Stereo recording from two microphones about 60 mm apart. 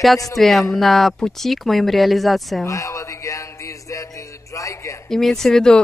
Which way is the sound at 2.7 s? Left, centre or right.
Left.